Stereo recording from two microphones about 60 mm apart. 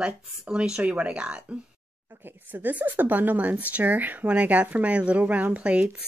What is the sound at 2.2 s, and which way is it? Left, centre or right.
Speech, right.